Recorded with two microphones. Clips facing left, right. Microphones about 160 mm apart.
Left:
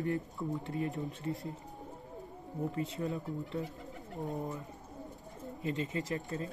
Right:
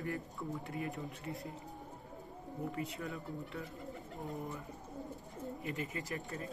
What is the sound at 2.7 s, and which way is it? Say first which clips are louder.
Speech: left 5 dB; 25° left (ahead or behind).